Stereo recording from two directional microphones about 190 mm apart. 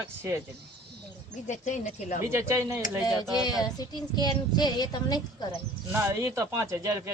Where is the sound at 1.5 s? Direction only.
40° left (ahead or behind).